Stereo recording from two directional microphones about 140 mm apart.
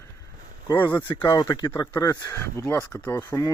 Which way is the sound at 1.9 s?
15° left (ahead or behind).